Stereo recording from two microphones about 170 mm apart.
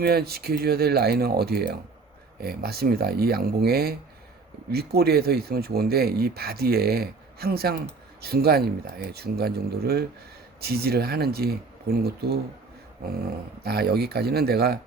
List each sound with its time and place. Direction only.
0.0 s speech: 65° right (ahead or behind)
13.6 s speech: 70° right (ahead or behind)